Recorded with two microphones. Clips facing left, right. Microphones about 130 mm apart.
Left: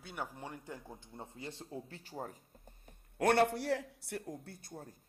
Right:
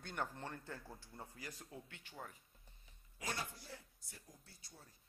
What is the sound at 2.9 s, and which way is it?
A man's voice, 60° left (ahead or behind).